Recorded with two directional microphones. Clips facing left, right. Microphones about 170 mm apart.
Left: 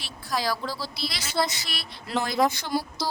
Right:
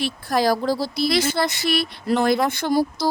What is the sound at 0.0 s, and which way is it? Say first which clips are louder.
Speech: right 9 dB; 55° right (ahead or behind).